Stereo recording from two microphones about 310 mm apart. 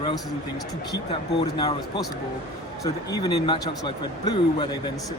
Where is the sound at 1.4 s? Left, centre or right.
Centre.